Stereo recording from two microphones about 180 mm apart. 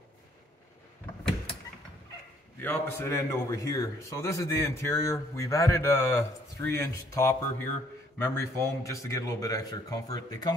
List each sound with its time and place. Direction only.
2.6 s a man's voice: 15° left (ahead or behind)